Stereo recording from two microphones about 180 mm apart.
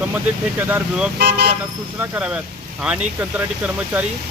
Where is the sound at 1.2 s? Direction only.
65° right (ahead or behind).